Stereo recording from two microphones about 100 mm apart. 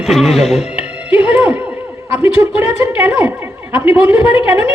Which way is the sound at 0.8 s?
10° right (ahead or behind).